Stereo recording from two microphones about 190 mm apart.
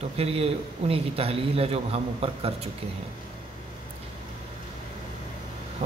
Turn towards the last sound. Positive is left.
turn(degrees=-35)  # may be behind; listen again after turning